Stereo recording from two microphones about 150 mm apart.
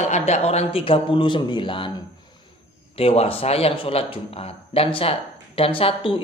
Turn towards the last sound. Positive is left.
turn(degrees=35)  # may be behind; listen again after turning